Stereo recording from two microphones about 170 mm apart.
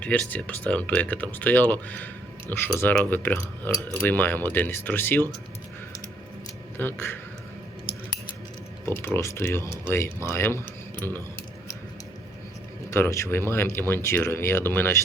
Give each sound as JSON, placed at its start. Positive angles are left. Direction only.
{"t": 0.0, "sound": "speech", "side_deg": 10}
{"t": 6.7, "sound": "speech", "side_deg": 15}
{"t": 9.1, "sound": "speech", "side_deg": 15}
{"t": 12.9, "sound": "speech", "side_deg": 15}